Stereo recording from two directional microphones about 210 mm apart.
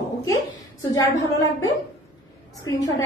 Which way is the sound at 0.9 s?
15° left (ahead or behind).